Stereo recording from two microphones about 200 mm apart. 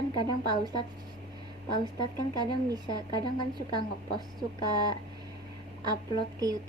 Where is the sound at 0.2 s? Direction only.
20° right (ahead or behind).